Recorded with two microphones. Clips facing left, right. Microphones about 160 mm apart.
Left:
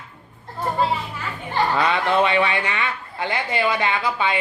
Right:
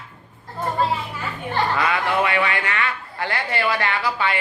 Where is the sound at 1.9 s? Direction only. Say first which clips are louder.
Left 2 dB; 25° left (ahead or behind).